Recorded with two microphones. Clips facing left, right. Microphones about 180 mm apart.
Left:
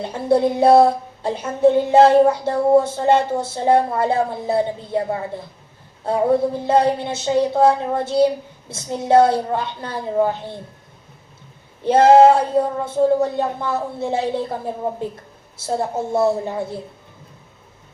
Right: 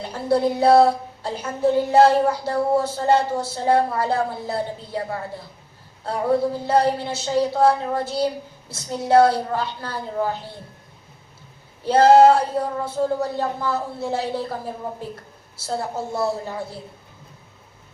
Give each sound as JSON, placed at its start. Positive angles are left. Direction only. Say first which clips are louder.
{"t": 0.0, "sound": "speech", "louder": "left 3 dB", "side_deg": 20}
{"t": 11.8, "sound": "speech", "louder": "left 2 dB", "side_deg": 20}